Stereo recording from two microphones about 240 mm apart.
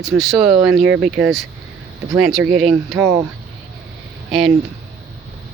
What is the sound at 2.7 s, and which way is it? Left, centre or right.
Speech, centre.